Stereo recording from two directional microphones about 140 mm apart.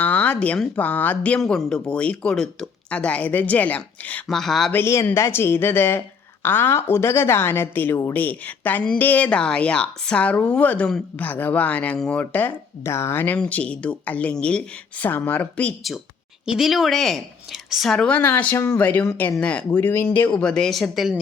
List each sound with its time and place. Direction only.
0.0 s a woman's voice: 10° left (ahead or behind)
4.7 s a woman's voice: 20° left (ahead or behind)
16.6 s a woman's voice: centre (ahead or behind)